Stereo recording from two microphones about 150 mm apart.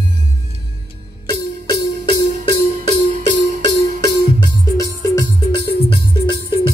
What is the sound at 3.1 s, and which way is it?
Music, 60° right (ahead or behind).